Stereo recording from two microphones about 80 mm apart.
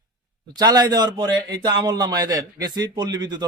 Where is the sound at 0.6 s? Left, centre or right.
Right.